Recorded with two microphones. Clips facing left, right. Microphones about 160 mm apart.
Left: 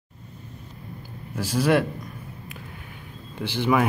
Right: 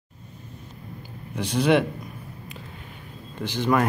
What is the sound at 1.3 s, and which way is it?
Speech, 5° left (ahead or behind).